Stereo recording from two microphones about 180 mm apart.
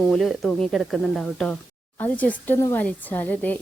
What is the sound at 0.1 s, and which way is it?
Speech, centre (ahead or behind).